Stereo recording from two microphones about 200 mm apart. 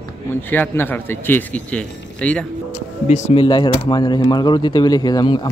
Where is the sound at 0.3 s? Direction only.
10° left (ahead or behind).